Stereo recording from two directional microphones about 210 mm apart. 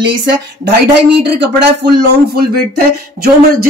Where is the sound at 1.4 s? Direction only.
50° right (ahead or behind).